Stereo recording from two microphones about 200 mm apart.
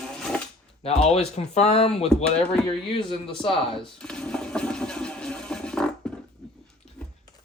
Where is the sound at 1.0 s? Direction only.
35° left (ahead or behind).